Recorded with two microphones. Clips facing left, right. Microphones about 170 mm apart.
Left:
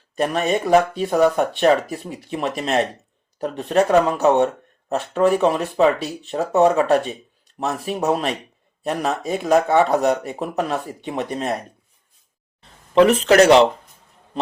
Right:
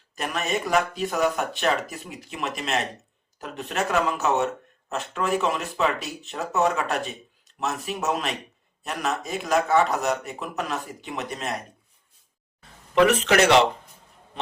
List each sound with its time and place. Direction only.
0.2 s speech: 30° left (ahead or behind)
12.9 s speech: 35° left (ahead or behind)